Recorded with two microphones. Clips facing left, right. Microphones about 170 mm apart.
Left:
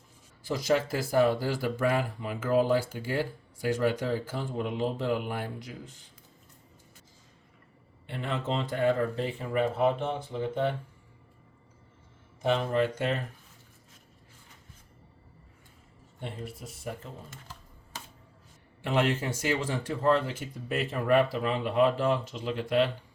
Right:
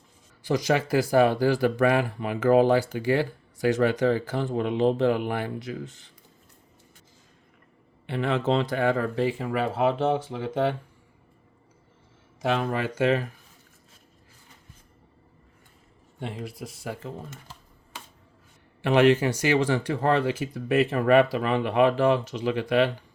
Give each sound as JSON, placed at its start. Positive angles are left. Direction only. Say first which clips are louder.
{"t": 0.4, "sound": "speech", "louder": "right 3 dB", "side_deg": -80}
{"t": 8.0, "sound": "speech", "louder": "right 8 dB", "side_deg": -90}
{"t": 12.4, "sound": "speech", "louder": "even", "side_deg": -90}
{"t": 16.2, "sound": "speech", "louder": "right 5 dB", "side_deg": -85}
{"t": 18.8, "sound": "speech", "louder": "right 8 dB", "side_deg": -80}